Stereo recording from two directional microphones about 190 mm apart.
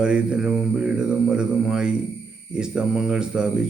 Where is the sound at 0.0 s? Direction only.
5° right (ahead or behind).